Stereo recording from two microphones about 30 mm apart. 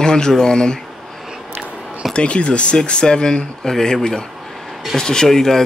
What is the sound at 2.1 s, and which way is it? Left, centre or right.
Speech, left.